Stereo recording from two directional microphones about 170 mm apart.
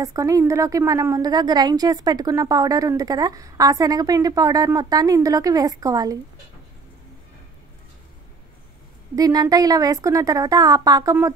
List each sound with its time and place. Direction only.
0.0 s a woman's voice: 20° right (ahead or behind)
9.1 s a woman's voice: 20° right (ahead or behind)